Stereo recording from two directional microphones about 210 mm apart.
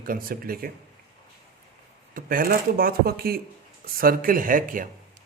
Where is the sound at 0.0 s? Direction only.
45° right (ahead or behind).